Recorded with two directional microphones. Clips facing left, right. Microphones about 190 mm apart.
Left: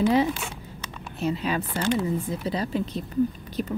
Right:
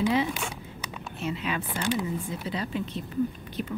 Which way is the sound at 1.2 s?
40° left (ahead or behind).